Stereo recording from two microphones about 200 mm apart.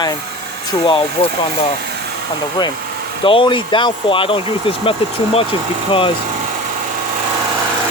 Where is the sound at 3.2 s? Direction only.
25° left (ahead or behind).